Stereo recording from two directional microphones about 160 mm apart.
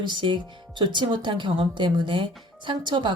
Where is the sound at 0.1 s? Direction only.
30° right (ahead or behind).